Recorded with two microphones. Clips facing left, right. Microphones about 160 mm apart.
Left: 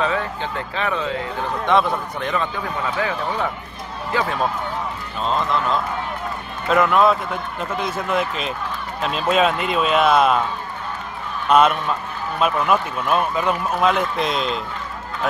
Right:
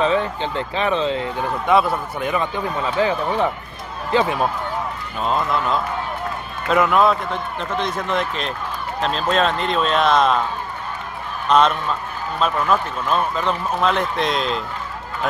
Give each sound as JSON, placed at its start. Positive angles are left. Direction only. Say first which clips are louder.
{"t": 0.0, "sound": "speech", "louder": "right 3 dB", "side_deg": -20}
{"t": 1.7, "sound": "a man's voice", "louder": "right 1 dB", "side_deg": -5}
{"t": 3.0, "sound": "speech", "louder": "right 6 dB", "side_deg": -25}
{"t": 5.2, "sound": "a man's voice", "louder": "even", "side_deg": -5}
{"t": 11.4, "sound": "a man's voice", "louder": "left 1 dB", "side_deg": 5}